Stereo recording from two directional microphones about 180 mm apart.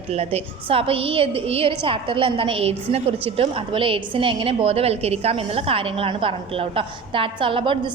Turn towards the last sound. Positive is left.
turn(degrees=-30)  # may be behind; listen again after turning